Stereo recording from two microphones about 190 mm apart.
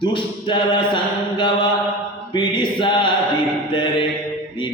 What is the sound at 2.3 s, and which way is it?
A man's voice, 25° left (ahead or behind).